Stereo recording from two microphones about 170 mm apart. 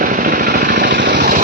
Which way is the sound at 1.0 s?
80° right.